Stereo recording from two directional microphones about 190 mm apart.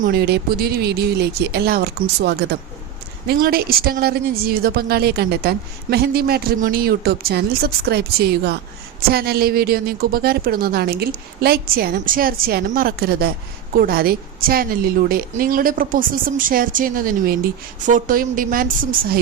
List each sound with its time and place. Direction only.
0.0 s a woman's voice: 55° right (ahead or behind)